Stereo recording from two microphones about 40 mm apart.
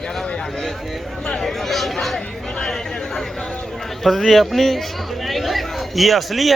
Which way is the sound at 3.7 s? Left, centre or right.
Centre.